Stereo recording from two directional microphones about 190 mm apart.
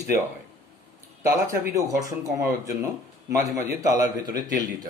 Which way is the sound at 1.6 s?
20° right (ahead or behind).